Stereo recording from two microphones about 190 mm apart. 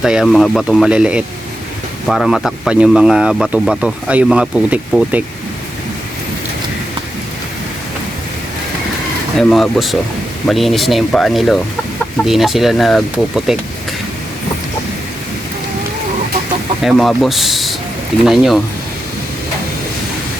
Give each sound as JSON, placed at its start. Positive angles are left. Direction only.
{"t": 0.0, "sound": "speech", "side_deg": 0}
{"t": 9.4, "sound": "speech", "side_deg": 0}
{"t": 16.8, "sound": "speech", "side_deg": 0}